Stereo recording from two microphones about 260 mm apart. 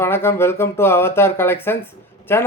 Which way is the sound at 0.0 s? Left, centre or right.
Centre.